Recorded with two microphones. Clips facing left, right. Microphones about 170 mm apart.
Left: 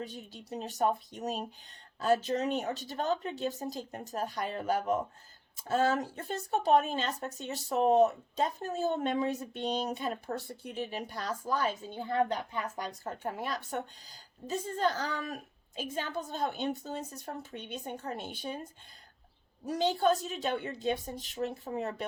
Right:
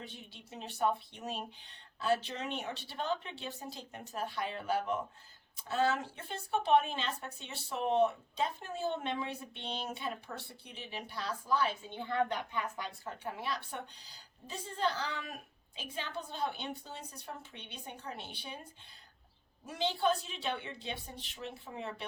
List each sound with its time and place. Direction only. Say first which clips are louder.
0.0 s speech: left 7 dB; 40° left (ahead or behind)